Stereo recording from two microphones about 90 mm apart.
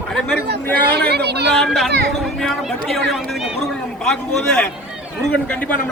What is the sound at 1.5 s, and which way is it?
Speech, 5° left (ahead or behind).